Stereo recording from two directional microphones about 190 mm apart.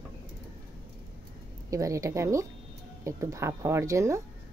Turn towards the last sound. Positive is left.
turn(degrees=-15)  # may be behind; listen again after turning